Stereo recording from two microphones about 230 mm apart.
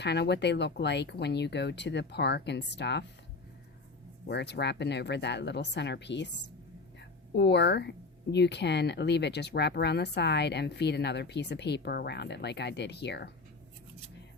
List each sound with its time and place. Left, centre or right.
0.0 s speech: left
4.3 s speech: left
7.3 s speech: left